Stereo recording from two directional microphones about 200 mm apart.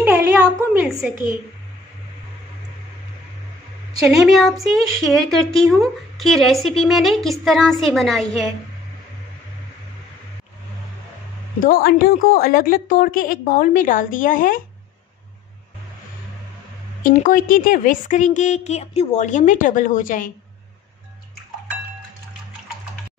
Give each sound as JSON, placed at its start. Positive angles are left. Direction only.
{"t": 0.0, "sound": "a sound", "side_deg": -15}
{"t": 4.0, "sound": "a woman's voice", "side_deg": 0}
{"t": 11.6, "sound": "a woman's voice", "side_deg": 50}
{"t": 17.0, "sound": "a woman's voice", "side_deg": 40}